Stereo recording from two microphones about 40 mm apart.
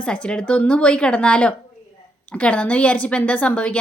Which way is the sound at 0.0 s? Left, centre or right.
Left.